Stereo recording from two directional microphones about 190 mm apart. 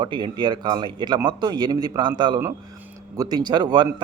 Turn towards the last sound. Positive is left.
turn(degrees=-20)  # may be behind; listen again after turning